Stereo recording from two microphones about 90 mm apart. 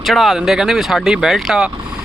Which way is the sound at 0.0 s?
Centre (ahead or behind).